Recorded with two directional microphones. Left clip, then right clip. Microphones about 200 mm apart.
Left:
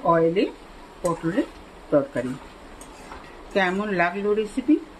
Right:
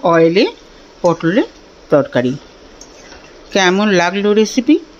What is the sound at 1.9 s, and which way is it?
Speech, 50° right (ahead or behind).